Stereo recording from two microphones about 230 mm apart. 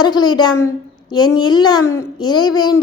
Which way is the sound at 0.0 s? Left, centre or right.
Centre.